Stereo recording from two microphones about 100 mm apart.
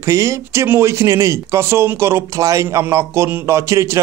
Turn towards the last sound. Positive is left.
turn(degrees=-30)  # may be behind; listen again after turning